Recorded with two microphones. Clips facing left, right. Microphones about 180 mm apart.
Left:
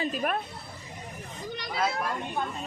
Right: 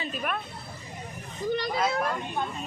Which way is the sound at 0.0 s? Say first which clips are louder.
Left 3 dB; 40° left (ahead or behind).